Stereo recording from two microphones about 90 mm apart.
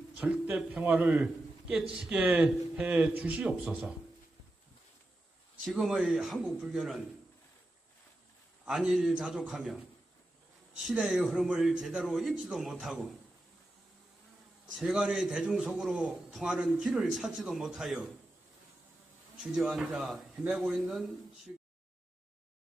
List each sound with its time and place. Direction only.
0.2 s a man's voice: 10° right (ahead or behind)
2.1 s a man's voice: 15° right (ahead or behind)
5.7 s a man's voice: 5° right (ahead or behind)
8.6 s a man's voice: 5° right (ahead or behind)
9.1 s a man's voice: 10° right (ahead or behind)
9.5 s a man's voice: centre (ahead or behind)
10.9 s a man's voice: 5° right (ahead or behind)
14.8 s a man's voice: 5° right (ahead or behind)
19.5 s a man's voice: 10° right (ahead or behind)